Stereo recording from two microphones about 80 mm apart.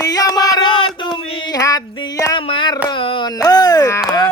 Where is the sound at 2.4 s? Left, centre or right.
Left.